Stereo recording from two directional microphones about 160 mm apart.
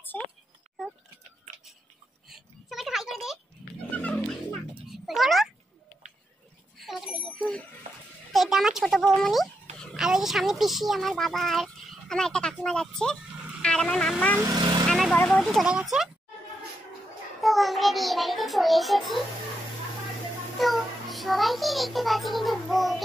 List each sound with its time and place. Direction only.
0.1 s speech: 10° left (ahead or behind)
2.2 s a sound: centre (ahead or behind)
3.9 s cat: 10° left (ahead or behind)
5.0 s a child's voice: centre (ahead or behind)
6.8 s bicycle bell: centre (ahead or behind)
8.3 s a child's voice: centre (ahead or behind)
14.4 s speech: 25° right (ahead or behind)
14.9 s vehicle: centre (ahead or behind)
15.1 s speech: 10° left (ahead or behind)
15.6 s a child's voice: 5° right (ahead or behind)
17.4 s a child's voice: centre (ahead or behind)
20.5 s a child's voice: centre (ahead or behind)